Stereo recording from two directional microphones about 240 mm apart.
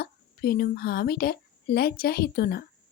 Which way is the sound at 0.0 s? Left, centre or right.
Left.